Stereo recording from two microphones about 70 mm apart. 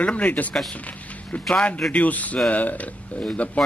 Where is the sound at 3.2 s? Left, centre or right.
Centre.